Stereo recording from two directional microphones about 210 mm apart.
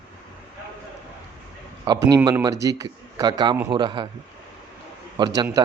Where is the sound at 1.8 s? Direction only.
20° right (ahead or behind).